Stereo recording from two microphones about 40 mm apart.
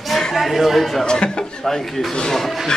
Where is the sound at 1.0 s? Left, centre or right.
Left.